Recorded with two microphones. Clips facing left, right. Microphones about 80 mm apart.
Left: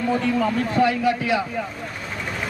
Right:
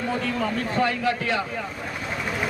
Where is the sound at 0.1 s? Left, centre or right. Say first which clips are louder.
Left 6 dB; centre.